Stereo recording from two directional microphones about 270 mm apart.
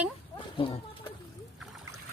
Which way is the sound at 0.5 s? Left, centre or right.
Centre.